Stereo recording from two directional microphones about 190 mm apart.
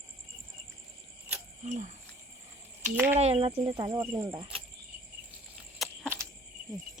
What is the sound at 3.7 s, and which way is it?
Speech, 20° right (ahead or behind).